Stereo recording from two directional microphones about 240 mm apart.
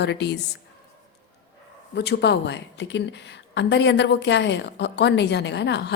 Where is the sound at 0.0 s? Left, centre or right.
Left.